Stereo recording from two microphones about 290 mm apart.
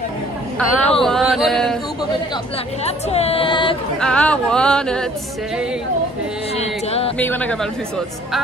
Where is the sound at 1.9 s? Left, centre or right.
Centre.